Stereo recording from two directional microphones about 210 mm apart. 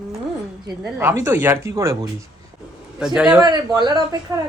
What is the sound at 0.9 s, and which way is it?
Speech, 10° right (ahead or behind).